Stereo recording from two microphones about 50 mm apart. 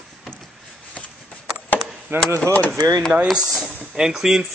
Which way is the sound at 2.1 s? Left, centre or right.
Right.